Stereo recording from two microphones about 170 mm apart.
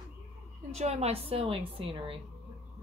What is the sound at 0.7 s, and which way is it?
A woman's voice, 40° right (ahead or behind).